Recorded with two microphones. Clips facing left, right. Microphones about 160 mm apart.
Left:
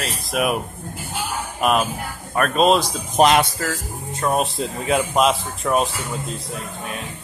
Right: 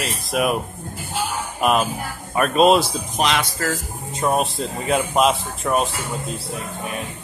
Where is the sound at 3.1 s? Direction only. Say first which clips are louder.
Left 7 dB; 45° left (ahead or behind).